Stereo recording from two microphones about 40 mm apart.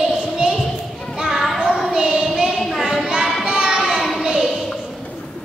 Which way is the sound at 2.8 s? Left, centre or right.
Right.